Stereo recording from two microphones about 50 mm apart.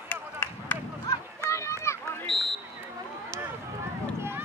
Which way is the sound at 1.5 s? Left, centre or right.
Left.